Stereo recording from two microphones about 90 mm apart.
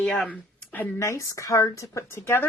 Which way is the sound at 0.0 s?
10° left (ahead or behind).